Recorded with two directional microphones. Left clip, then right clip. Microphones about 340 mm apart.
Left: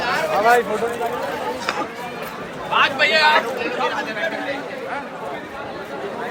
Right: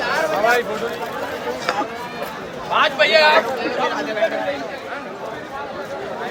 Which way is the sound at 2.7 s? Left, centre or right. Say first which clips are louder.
Right 2 dB; right.